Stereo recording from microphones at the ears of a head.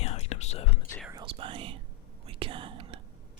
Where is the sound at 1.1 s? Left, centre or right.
Right.